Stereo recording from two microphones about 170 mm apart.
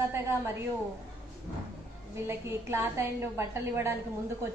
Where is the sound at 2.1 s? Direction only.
15° right (ahead or behind).